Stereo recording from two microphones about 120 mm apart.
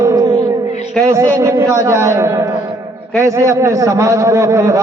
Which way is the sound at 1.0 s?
25° right (ahead or behind).